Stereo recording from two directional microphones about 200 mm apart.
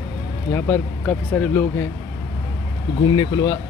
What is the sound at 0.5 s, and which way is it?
Speech, 10° left (ahead or behind).